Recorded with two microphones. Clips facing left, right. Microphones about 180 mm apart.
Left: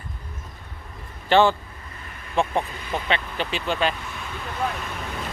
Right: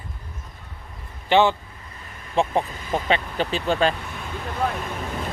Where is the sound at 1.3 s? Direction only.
20° right (ahead or behind).